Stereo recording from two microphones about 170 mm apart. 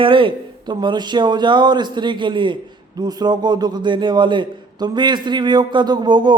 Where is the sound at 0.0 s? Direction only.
30° right (ahead or behind).